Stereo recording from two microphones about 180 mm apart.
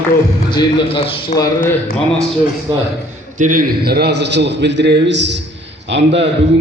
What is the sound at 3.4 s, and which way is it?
A man's voice, 50° right (ahead or behind).